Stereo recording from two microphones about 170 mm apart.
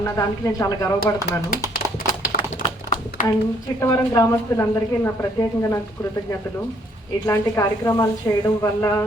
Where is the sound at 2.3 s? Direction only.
55° left (ahead or behind).